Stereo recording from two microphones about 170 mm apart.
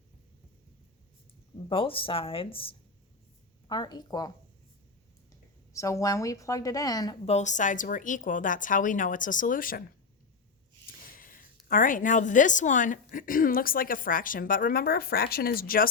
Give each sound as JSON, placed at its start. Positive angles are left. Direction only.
{"t": 1.7, "sound": "a woman's voice", "side_deg": 30}
{"t": 5.7, "sound": "a woman's voice", "side_deg": 20}
{"t": 7.3, "sound": "a woman's voice", "side_deg": 45}
{"t": 11.0, "sound": "a woman's voice", "side_deg": 55}